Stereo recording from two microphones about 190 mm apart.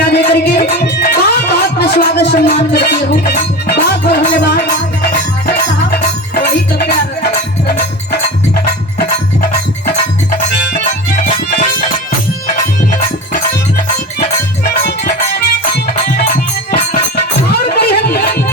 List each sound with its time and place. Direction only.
0.0 s music: 60° left (ahead or behind)
10.8 s music: 45° left (ahead or behind)
14.2 s music: 55° left (ahead or behind)